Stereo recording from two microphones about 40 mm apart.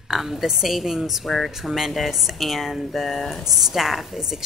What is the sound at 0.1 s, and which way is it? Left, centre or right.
Speech, centre.